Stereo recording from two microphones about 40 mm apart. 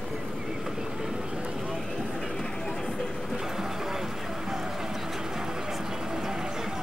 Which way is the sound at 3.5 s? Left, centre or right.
Centre.